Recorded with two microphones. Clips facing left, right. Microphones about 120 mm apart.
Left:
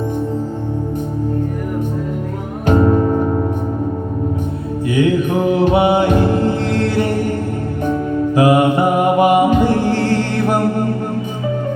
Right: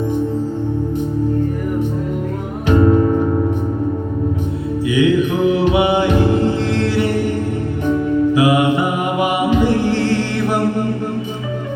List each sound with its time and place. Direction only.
2.6 s music: 45° left (ahead or behind)
4.9 s mantra: 45° left (ahead or behind)
8.3 s mantra: 45° left (ahead or behind)